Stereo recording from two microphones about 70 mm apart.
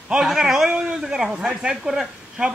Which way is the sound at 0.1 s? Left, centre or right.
Centre.